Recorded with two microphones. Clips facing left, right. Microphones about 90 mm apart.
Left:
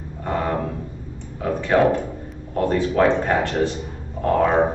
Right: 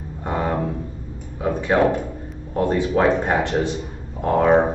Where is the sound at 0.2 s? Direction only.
15° right (ahead or behind).